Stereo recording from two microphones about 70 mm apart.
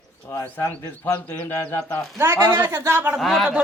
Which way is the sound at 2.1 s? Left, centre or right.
Right.